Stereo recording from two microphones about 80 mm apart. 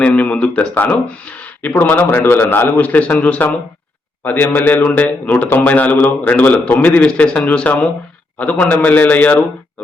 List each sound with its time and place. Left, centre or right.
0.0 s a man's voice: centre